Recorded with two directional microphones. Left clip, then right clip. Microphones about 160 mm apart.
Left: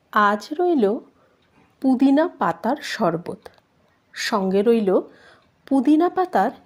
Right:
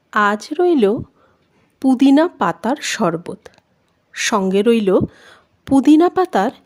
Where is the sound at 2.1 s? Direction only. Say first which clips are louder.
Right 4 dB; 35° right (ahead or behind).